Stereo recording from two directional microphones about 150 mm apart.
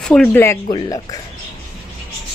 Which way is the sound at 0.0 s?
5° left (ahead or behind).